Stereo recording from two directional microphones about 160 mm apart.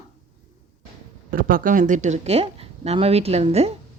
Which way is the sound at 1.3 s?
60° right (ahead or behind).